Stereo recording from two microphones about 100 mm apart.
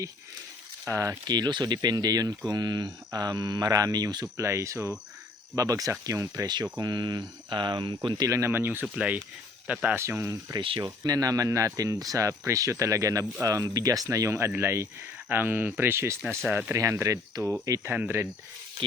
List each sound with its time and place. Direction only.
0.9 s speech: 30° right (ahead or behind)
1.3 s speech: 45° right (ahead or behind)
4.4 s speech: 30° right (ahead or behind); by 8.3 s 50° right (ahead or behind)
8.3 s speech: 30° right (ahead or behind)
9.8 s speech: 25° right (ahead or behind)
10.8 s speech: 40° right (ahead or behind); by 16.7 s 15° right (ahead or behind)
16.7 s speech: 30° right (ahead or behind)